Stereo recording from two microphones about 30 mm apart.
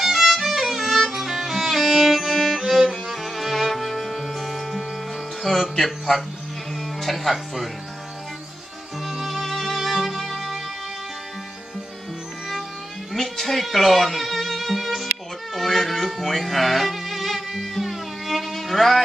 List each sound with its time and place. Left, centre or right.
0.0 s music: centre
0.8 s music: centre
1.1 s music: centre
5.8 s a man's voice: centre
9.0 s music: centre
13.1 s music: centre
15.5 s a sound: centre
16.2 s music: centre